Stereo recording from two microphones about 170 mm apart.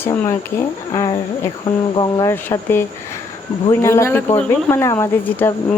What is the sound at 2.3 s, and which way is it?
Speech, 10° left (ahead or behind).